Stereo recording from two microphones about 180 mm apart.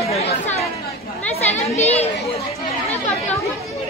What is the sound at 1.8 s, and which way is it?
Speech, 35° left (ahead or behind).